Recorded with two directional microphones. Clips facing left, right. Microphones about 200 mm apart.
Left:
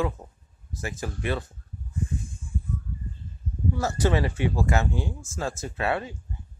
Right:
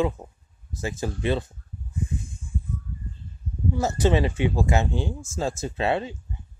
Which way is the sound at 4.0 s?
20° right (ahead or behind).